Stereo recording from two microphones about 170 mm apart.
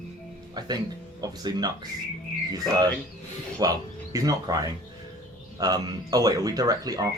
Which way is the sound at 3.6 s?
20° right (ahead or behind).